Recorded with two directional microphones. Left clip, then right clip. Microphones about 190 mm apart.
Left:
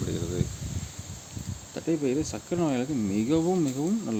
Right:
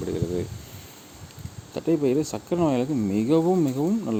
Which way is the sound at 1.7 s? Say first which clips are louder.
Right 5 dB; 20° right (ahead or behind).